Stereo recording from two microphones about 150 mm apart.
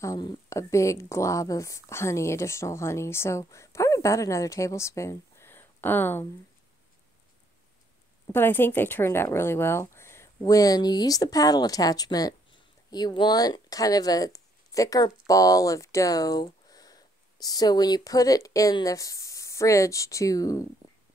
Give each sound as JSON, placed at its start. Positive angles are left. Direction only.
{"t": 0.0, "sound": "speech", "side_deg": 25}
{"t": 8.3, "sound": "speech", "side_deg": 15}